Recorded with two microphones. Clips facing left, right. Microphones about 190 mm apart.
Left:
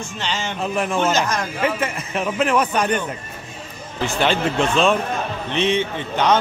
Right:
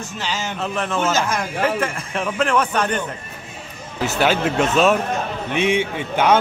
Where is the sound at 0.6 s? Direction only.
10° left (ahead or behind).